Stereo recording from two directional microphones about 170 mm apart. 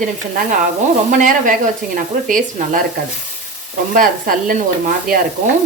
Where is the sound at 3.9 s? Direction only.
55° right (ahead or behind).